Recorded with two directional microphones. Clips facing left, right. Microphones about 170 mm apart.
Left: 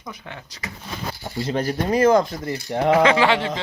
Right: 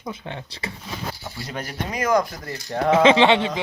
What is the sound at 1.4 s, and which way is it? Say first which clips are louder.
Speech: left 10 dB; 30° left (ahead or behind).